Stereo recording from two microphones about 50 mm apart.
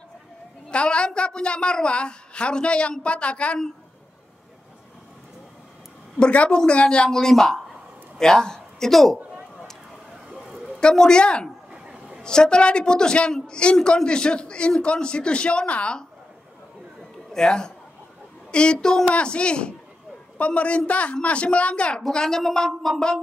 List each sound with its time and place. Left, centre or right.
0.7 s a woman's voice: centre
6.1 s a woman's voice: left
7.1 s a woman's voice: centre
10.3 s a sound: centre
10.8 s a woman's voice: centre
11.7 s a sound: centre
12.2 s a woman's voice: centre
17.3 s a man's voice: centre
22.0 s a woman's voice: centre